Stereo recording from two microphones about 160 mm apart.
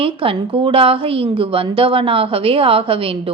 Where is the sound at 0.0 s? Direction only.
35° right (ahead or behind).